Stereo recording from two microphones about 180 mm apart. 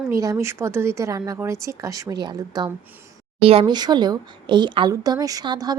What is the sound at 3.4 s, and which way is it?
Speech, 30° right (ahead or behind).